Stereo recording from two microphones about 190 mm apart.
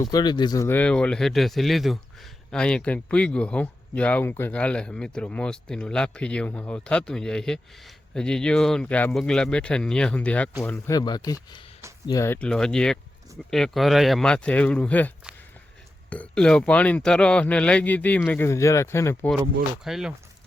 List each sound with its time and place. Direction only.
0.0 s a man's voice: 20° left (ahead or behind)
19.8 s speech: centre (ahead or behind)